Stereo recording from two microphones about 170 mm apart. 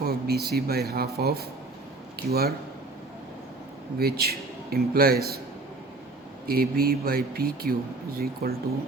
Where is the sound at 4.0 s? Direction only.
65° right (ahead or behind).